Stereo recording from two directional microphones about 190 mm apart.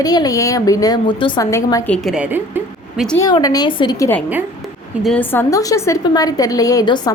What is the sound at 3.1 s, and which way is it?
Speech, 20° left (ahead or behind).